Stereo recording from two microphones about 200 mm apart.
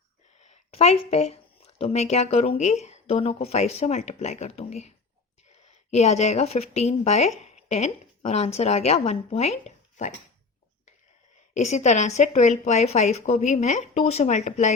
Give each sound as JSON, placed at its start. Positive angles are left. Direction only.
{"t": 0.3, "sound": "a woman's voice", "side_deg": 35}
{"t": 11.5, "sound": "a woman's voice", "side_deg": 35}